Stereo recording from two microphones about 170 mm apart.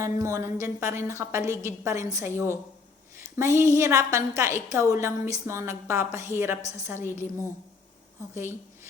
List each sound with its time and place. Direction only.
0.0 s a woman's voice: 15° right (ahead or behind)
3.6 s a woman's voice: 15° right (ahead or behind)
8.4 s a sound: 15° right (ahead or behind)